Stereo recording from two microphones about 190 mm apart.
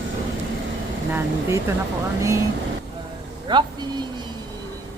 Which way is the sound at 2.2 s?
15° right (ahead or behind).